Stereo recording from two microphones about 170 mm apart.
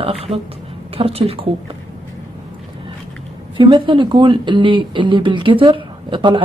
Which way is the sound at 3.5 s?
30° right (ahead or behind).